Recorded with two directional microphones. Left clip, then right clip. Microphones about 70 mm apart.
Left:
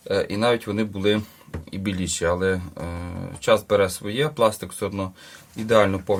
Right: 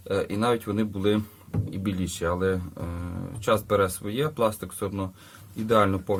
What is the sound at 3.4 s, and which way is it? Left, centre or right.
Speech, right.